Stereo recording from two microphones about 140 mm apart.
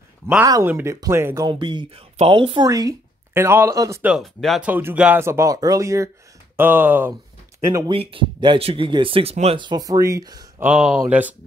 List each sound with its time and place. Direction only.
0.4 s speech: 20° right (ahead or behind)
1.5 s speech: 35° right (ahead or behind)
2.7 s speech: 25° right (ahead or behind)
4.2 s speech: centre (ahead or behind)
4.6 s speech: 10° right (ahead or behind)
7.9 s speech: 40° right (ahead or behind)
9.7 s speech: 25° right (ahead or behind)
10.6 s speech: 10° right (ahead or behind)